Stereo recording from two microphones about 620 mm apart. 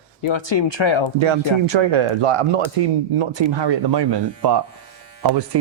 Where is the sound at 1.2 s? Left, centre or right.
Right.